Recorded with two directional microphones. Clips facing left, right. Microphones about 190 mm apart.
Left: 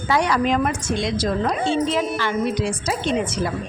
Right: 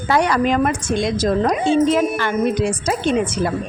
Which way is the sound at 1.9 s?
50° right (ahead or behind).